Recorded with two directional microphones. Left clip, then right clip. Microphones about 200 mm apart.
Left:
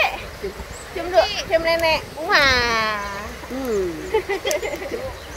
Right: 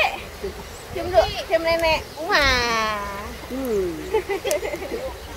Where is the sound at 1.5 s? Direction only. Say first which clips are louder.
Left 1 dB; 15° left (ahead or behind).